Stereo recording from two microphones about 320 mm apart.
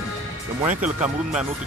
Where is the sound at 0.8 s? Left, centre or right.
Centre.